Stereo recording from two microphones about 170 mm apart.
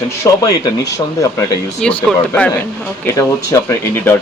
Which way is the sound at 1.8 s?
5° left (ahead or behind).